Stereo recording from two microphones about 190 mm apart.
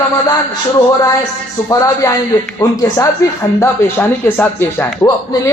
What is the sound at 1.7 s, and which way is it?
Speech, 15° left (ahead or behind).